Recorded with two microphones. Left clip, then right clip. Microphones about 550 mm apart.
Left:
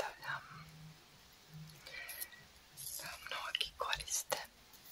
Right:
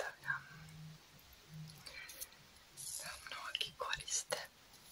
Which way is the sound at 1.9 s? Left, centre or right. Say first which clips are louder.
Left 3 dB; left.